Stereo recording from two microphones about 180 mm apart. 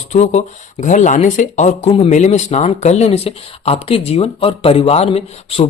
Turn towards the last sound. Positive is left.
turn(degrees=35)  # may be behind; listen again after turning